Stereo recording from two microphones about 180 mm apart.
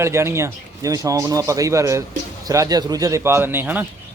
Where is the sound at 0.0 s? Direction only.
15° right (ahead or behind).